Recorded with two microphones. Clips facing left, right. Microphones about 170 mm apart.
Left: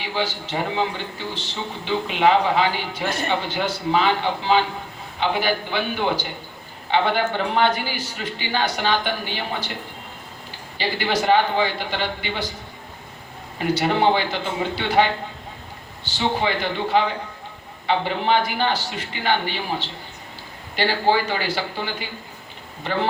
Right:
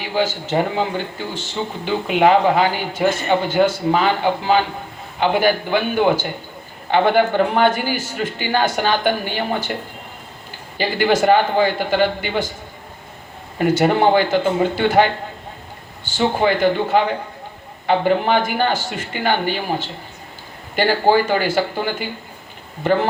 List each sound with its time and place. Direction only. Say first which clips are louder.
0.0 s a man's voice: right 5 dB; 50° right (ahead or behind)
10.8 s a man's voice: right 6 dB; 50° right (ahead or behind)
13.6 s a man's voice: right 5 dB; 50° right (ahead or behind)